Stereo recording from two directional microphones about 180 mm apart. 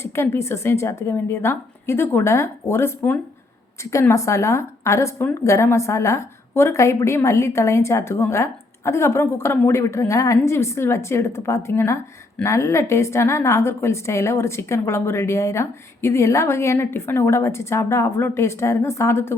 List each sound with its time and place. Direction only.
0.0 s a woman's voice: 15° left (ahead or behind)